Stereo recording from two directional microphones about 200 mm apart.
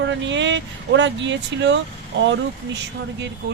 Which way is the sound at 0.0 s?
65° right (ahead or behind).